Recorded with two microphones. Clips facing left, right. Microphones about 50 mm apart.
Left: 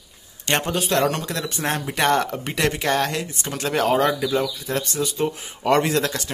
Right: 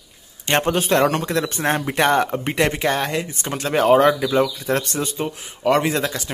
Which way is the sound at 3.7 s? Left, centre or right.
Centre.